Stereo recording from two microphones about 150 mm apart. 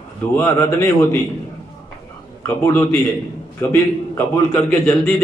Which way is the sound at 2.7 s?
15° left (ahead or behind).